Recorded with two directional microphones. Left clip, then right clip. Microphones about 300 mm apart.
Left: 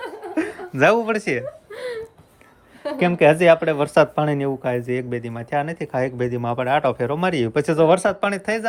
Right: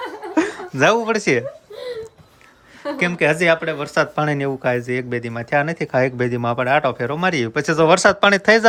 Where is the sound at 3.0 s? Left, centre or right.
Centre.